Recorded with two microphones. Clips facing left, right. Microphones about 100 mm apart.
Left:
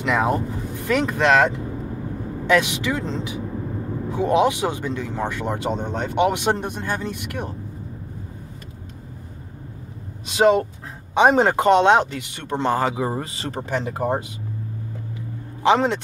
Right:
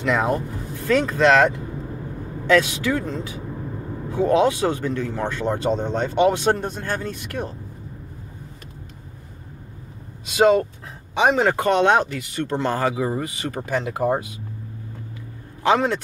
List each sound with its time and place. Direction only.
0.0 s speech: 15° left (ahead or behind)
2.4 s speech: 20° left (ahead or behind)
11.1 s speech: 35° left (ahead or behind)
15.6 s speech: 20° left (ahead or behind)